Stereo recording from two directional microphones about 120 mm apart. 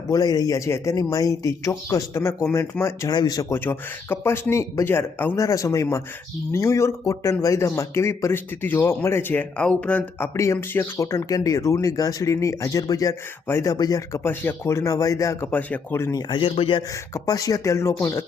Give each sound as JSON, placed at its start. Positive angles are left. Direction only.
{"t": 0.1, "sound": "speech", "side_deg": 30}
{"t": 3.1, "sound": "speech", "side_deg": 35}
{"t": 3.5, "sound": "speech", "side_deg": 20}
{"t": 10.3, "sound": "speech", "side_deg": 25}
{"t": 14.3, "sound": "speech", "side_deg": 20}
{"t": 16.3, "sound": "a man's voice", "side_deg": 45}
{"t": 16.9, "sound": "speech", "side_deg": 30}